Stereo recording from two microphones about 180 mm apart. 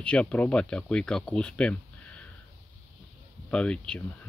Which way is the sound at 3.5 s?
5° left (ahead or behind).